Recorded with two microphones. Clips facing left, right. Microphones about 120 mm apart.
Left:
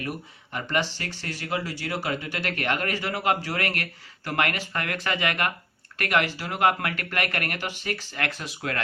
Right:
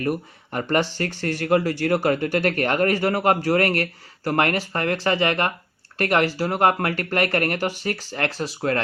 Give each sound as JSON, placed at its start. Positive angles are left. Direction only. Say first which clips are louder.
{"t": 0.5, "sound": "speech", "louder": "right 5 dB", "side_deg": -45}